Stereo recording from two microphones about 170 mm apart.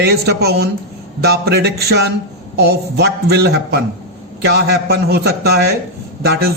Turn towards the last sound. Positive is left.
turn(degrees=-75)  # may be behind; listen again after turning